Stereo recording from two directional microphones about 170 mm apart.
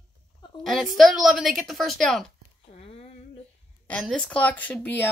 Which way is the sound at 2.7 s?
35° left (ahead or behind).